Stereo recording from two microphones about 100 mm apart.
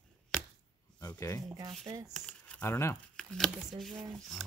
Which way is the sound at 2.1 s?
10° left (ahead or behind).